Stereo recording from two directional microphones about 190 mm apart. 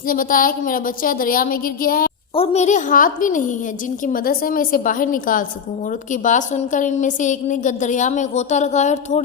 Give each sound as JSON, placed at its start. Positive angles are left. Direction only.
{"t": 0.1, "sound": "a woman's voice", "side_deg": 45}
{"t": 2.3, "sound": "a woman's voice", "side_deg": 30}